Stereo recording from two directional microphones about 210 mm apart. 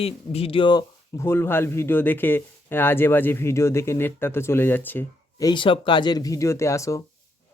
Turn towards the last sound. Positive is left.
turn(degrees=15)  # may be behind; listen again after turning